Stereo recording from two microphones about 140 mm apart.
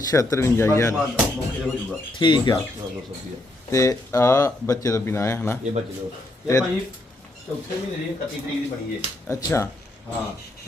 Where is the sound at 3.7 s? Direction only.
20° left (ahead or behind).